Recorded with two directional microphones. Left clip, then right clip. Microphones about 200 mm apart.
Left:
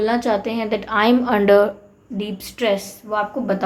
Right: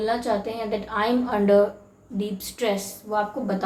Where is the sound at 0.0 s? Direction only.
45° left (ahead or behind).